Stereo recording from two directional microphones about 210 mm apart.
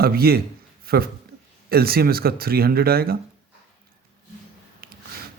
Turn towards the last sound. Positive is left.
turn(degrees=-45)  # may be behind; listen again after turning